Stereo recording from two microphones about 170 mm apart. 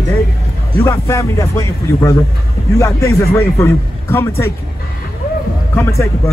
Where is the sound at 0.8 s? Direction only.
15° left (ahead or behind).